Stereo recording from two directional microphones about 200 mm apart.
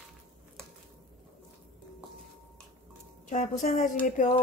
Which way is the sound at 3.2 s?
40° left (ahead or behind).